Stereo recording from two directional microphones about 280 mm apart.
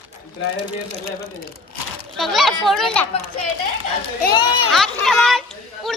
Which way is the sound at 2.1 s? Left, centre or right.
Centre.